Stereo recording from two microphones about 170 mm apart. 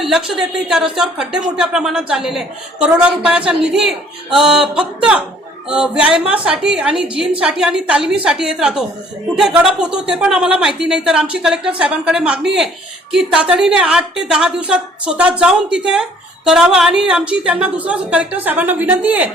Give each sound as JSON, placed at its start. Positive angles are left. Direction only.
{"t": 0.0, "sound": "a woman's voice", "side_deg": 0}